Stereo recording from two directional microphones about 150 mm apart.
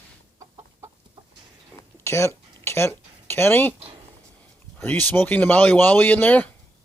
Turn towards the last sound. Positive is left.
turn(degrees=10)  # may be behind; listen again after turning